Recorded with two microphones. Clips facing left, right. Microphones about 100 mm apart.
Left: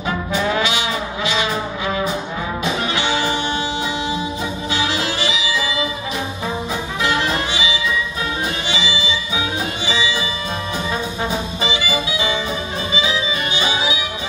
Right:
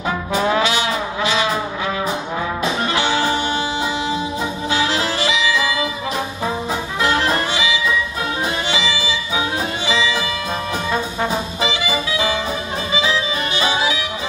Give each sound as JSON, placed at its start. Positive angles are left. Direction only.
{"t": 0.3, "sound": "brass instrument", "side_deg": -40}
{"t": 2.9, "sound": "music", "side_deg": -45}
{"t": 7.0, "sound": "music", "side_deg": -45}
{"t": 9.3, "sound": "music", "side_deg": -45}
{"t": 10.9, "sound": "brass instrument", "side_deg": -50}
{"t": 13.6, "sound": "music", "side_deg": -50}